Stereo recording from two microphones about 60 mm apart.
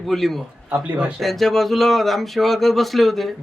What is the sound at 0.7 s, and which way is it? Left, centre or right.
Speech, centre.